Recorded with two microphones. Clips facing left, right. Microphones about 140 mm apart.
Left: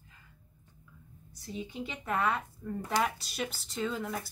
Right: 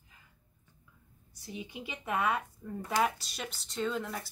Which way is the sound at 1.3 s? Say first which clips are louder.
Left 3 dB; 15° right (ahead or behind).